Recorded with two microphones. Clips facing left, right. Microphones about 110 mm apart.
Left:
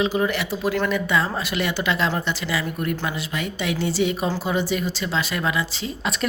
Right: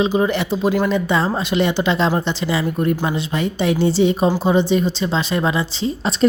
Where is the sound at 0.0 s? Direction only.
25° right (ahead or behind).